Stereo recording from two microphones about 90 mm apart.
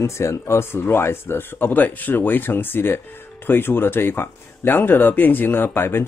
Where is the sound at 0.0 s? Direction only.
30° left (ahead or behind).